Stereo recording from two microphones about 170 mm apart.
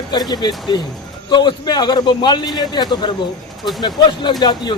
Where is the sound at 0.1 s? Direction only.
25° left (ahead or behind).